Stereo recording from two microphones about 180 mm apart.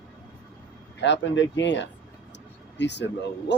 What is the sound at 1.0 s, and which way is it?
Speech, 85° left.